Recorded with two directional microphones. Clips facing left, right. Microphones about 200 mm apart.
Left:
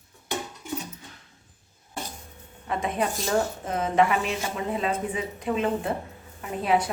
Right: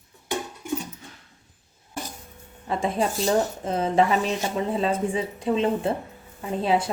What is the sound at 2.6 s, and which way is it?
A woman's voice, 30° right (ahead or behind).